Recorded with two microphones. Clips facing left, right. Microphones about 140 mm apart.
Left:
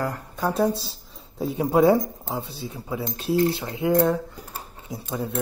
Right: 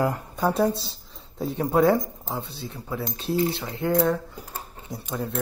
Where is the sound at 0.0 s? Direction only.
15° right (ahead or behind).